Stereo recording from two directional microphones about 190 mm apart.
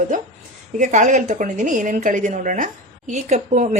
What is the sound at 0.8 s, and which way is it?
A woman's voice, 40° right (ahead or behind).